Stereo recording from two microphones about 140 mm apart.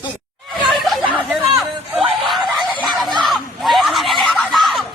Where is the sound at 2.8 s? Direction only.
Centre (ahead or behind).